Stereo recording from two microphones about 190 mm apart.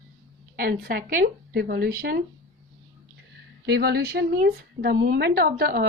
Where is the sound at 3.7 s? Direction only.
55° right (ahead or behind).